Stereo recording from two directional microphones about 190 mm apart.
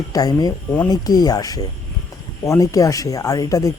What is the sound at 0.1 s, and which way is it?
Speech, 20° left (ahead or behind).